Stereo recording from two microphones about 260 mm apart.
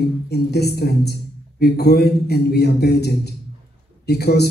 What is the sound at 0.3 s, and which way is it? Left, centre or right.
A man's voice, left.